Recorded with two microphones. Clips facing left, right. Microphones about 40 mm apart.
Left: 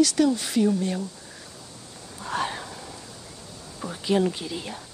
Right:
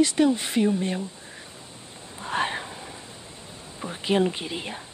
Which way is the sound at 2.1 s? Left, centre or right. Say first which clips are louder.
Right 2 dB; right.